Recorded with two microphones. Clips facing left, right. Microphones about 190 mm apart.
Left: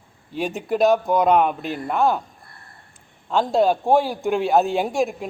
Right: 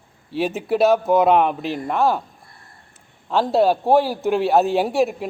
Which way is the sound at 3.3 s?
5° right (ahead or behind).